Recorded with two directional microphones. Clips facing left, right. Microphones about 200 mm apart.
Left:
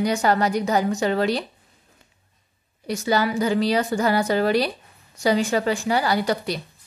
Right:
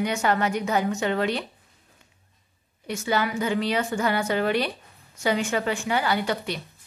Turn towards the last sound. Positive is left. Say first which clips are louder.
# left 3 dB
turn(degrees=40)  # may be behind; listen again after turning